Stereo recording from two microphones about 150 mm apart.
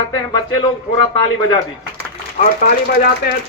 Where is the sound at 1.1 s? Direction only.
25° left (ahead or behind).